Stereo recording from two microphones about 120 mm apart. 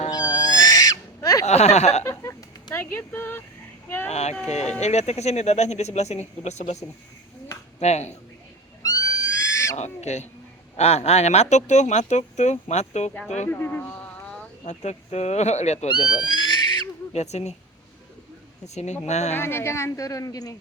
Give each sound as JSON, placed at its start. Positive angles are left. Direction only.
{"t": 0.1, "sound": "owl", "side_deg": 35}
{"t": 1.5, "sound": "speech", "side_deg": 65}
{"t": 2.7, "sound": "speech", "side_deg": 15}
{"t": 4.1, "sound": "speech", "side_deg": 65}
{"t": 7.8, "sound": "speech", "side_deg": 65}
{"t": 8.8, "sound": "a sound", "side_deg": 30}
{"t": 9.7, "sound": "speech", "side_deg": 70}
{"t": 13.5, "sound": "speech", "side_deg": 15}
{"t": 14.6, "sound": "speech", "side_deg": 70}
{"t": 16.0, "sound": "pig", "side_deg": 40}
{"t": 17.1, "sound": "speech", "side_deg": 65}
{"t": 18.6, "sound": "speech", "side_deg": 70}
{"t": 19.4, "sound": "a woman's voice", "side_deg": 20}